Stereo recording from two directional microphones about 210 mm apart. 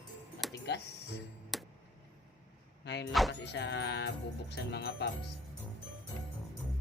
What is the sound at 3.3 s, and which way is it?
Music, 55° left (ahead or behind).